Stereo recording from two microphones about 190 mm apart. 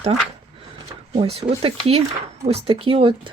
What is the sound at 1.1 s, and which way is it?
Speech, 30° right (ahead or behind).